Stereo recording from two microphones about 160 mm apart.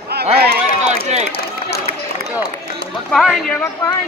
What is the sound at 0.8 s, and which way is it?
Run, 45° right (ahead or behind).